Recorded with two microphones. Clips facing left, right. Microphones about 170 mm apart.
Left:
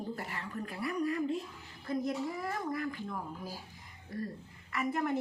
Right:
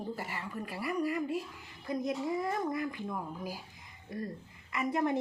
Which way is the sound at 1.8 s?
20° right (ahead or behind).